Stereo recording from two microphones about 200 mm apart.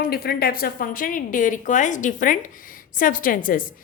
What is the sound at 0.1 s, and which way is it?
A woman's voice, 50° left (ahead or behind).